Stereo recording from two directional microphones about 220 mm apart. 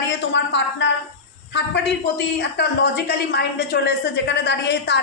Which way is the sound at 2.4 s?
50° left (ahead or behind).